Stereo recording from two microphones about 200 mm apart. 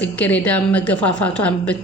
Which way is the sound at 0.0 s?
5° left (ahead or behind).